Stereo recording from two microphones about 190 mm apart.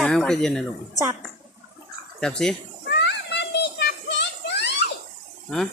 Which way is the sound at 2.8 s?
65° left (ahead or behind).